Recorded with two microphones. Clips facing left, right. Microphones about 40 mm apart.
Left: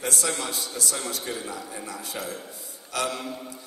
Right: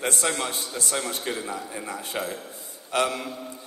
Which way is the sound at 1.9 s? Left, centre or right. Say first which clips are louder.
Right 5 dB; right.